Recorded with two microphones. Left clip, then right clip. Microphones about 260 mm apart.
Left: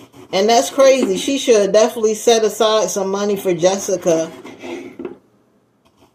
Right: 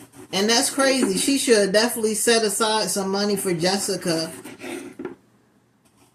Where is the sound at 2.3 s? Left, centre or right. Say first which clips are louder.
Left 5 dB; right.